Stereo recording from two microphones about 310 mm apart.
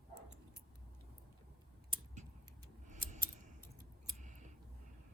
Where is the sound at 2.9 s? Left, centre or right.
Right.